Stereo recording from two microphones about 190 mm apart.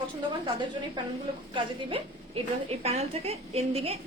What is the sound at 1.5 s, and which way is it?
A woman's voice, 25° right (ahead or behind).